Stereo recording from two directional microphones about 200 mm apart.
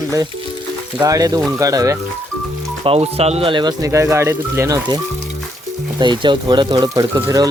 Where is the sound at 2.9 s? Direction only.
30° right (ahead or behind).